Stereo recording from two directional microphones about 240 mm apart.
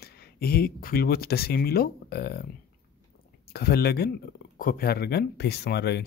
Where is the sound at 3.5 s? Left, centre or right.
Left.